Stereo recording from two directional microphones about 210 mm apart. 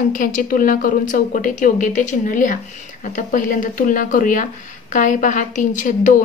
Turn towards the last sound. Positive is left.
turn(degrees=35)  # may be behind; listen again after turning